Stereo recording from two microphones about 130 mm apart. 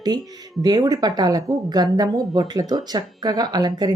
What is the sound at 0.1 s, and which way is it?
Speech, 35° right (ahead or behind).